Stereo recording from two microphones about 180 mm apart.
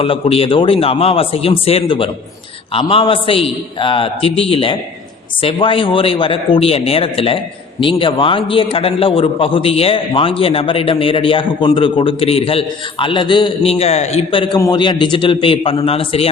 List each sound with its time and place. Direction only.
0.0 s a man's voice: 30° left (ahead or behind)